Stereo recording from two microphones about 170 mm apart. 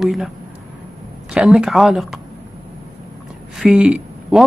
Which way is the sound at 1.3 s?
5° right (ahead or behind).